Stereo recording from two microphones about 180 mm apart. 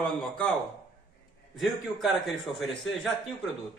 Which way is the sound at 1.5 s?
Centre (ahead or behind).